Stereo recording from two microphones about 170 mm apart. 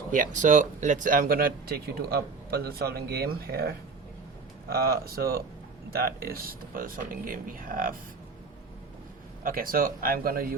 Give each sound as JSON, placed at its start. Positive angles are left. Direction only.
{"t": 0.1, "sound": "speech", "side_deg": -50}
{"t": 9.4, "sound": "speech", "side_deg": -55}